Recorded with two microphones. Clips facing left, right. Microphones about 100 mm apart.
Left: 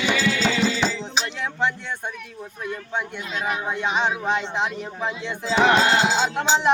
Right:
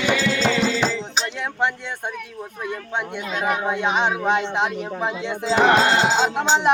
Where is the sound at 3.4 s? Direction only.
60° right (ahead or behind).